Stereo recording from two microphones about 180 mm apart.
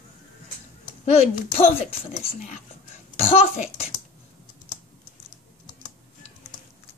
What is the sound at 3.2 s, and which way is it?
Speech, 35° left (ahead or behind).